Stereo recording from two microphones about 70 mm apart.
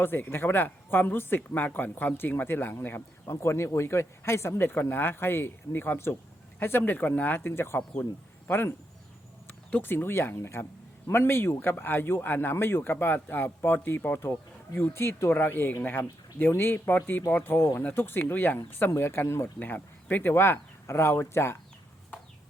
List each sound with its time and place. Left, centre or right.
0.0 s speech: left
3.2 s speech: left
9.8 s speech: left
19.5 s speech: left